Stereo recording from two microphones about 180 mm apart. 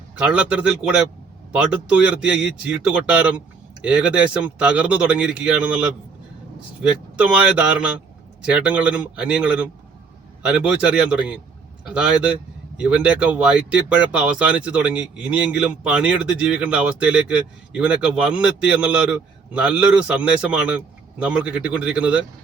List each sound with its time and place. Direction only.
0.3 s speech: 5° right (ahead or behind)
7.2 s speech: 5° right (ahead or behind)